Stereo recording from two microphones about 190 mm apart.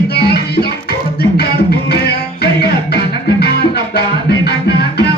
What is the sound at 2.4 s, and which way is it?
Music, 60° left (ahead or behind).